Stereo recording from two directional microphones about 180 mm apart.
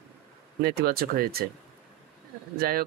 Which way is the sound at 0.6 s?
60° right (ahead or behind).